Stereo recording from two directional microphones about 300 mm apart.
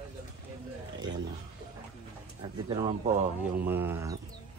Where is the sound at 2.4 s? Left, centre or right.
Centre.